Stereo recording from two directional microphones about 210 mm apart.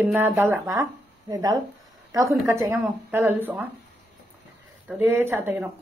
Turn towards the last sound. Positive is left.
turn(degrees=-10)  # may be behind; listen again after turning